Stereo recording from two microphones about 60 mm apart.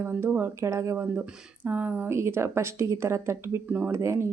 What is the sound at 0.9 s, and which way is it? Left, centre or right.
Speech, right.